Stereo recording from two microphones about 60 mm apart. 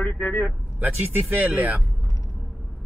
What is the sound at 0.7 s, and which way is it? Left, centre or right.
Speech, right.